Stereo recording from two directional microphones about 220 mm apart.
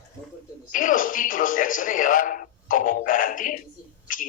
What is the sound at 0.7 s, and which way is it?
Television, 35° left (ahead or behind).